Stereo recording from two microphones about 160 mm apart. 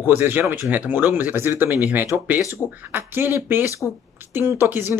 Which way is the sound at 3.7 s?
20° left (ahead or behind).